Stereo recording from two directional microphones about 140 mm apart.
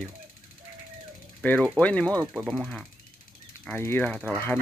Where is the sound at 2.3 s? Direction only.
5° right (ahead or behind).